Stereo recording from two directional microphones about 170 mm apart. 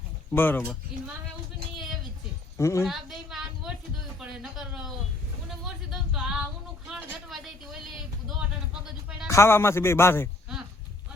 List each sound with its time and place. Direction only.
0.3 s a man's voice: 10° left (ahead or behind)
2.6 s a man's voice: 15° left (ahead or behind)
2.8 s a sound: centre (ahead or behind)
9.2 s a man's voice: 15° left (ahead or behind)